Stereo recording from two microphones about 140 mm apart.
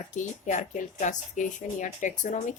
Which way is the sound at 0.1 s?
65° left (ahead or behind).